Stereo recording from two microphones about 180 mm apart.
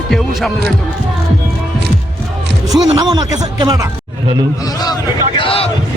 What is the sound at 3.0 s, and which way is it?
Speech, 20° right (ahead or behind).